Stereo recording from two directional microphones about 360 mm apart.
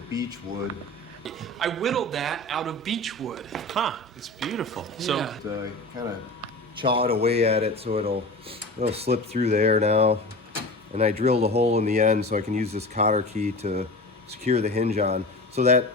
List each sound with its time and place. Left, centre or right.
0.1 s speech: centre
1.2 s speech: centre
6.8 s speech: centre